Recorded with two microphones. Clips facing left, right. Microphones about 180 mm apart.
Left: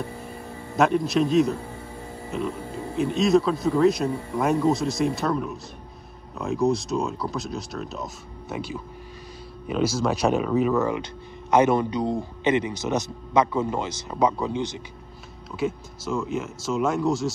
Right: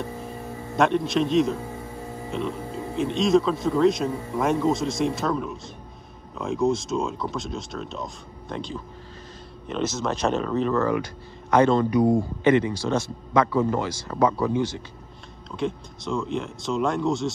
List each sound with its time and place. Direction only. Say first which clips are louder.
0.7 s speech: left 1 dB; centre (ahead or behind)
10.8 s speech: right 1 dB; 20° left (ahead or behind)
15.5 s speech: left 1 dB; 5° left (ahead or behind)